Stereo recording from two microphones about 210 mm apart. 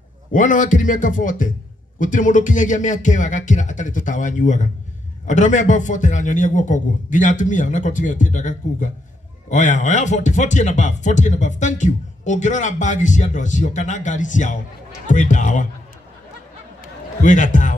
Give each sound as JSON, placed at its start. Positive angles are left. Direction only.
{"t": 0.3, "sound": "speech", "side_deg": 35}
{"t": 17.2, "sound": "speech", "side_deg": 35}